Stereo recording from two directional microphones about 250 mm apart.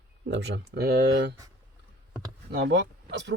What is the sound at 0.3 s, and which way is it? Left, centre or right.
Speech, right.